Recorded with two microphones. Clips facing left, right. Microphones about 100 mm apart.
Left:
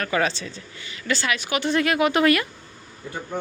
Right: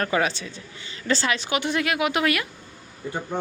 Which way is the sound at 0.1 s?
15° right (ahead or behind).